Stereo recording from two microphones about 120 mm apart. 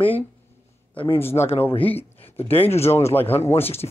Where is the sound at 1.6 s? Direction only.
50° left (ahead or behind).